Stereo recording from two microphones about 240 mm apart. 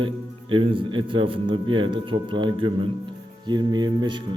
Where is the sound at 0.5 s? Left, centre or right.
Right.